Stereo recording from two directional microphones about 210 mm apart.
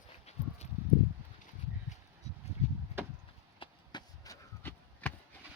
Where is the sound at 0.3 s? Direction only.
30° left (ahead or behind).